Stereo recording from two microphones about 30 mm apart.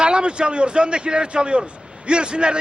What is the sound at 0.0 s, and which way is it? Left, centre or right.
A man's voice, right.